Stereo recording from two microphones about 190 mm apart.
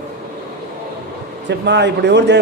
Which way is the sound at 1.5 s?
65° right (ahead or behind).